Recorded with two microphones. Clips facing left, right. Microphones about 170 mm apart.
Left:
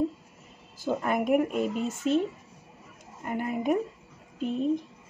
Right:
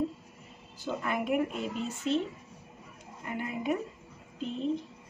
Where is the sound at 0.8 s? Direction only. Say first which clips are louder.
Left 5 dB; 45° left (ahead or behind).